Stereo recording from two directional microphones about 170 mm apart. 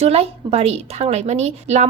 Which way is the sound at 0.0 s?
40° right (ahead or behind).